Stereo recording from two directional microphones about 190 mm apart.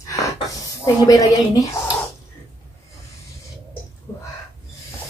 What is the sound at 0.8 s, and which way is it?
Speech, 20° left (ahead or behind).